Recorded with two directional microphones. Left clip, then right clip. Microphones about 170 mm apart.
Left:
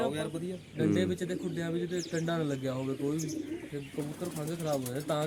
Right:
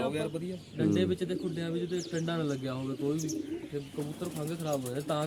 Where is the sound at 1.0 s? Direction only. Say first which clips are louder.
Right 1 dB; 25° left (ahead or behind).